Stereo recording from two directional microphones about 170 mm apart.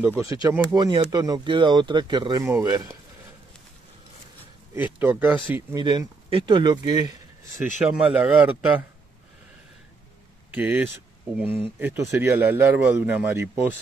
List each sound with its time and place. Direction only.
0.2 s speech: 20° right (ahead or behind)
4.7 s speech: 10° right (ahead or behind)
5.8 s speech: 25° right (ahead or behind)
7.8 s speech: 5° right (ahead or behind)
10.5 s speech: 10° right (ahead or behind)